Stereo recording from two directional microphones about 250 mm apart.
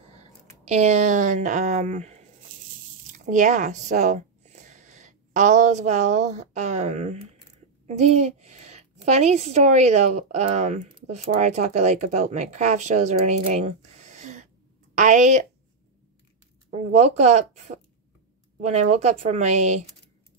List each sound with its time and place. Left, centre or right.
0.7 s a woman's voice: right
16.9 s a woman's voice: right